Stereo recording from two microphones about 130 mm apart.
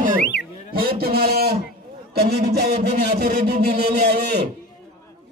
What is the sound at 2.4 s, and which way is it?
Speech, 55° right (ahead or behind).